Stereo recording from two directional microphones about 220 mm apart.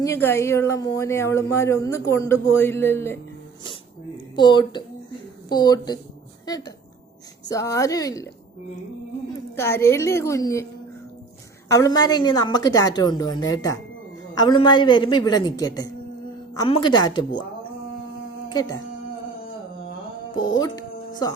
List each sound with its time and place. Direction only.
0.0 s speech: 10° left (ahead or behind)
4.4 s a woman's voice: 20° left (ahead or behind)
9.6 s speech: 10° left (ahead or behind)
11.7 s a woman's voice: 15° left (ahead or behind)
20.3 s speech: 15° left (ahead or behind)